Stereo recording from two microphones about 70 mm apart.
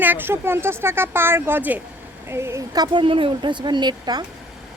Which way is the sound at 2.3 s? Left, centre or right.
Right.